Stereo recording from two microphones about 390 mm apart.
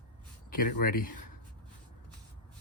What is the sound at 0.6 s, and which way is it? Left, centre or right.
Speech, left.